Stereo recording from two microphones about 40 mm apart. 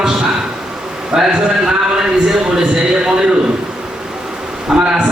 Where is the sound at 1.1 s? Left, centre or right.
Centre.